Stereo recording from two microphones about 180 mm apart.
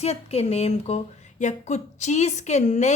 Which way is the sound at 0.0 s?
35° left (ahead or behind).